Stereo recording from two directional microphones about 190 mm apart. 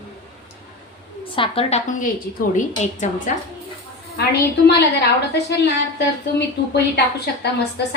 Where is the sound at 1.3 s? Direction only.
30° left (ahead or behind).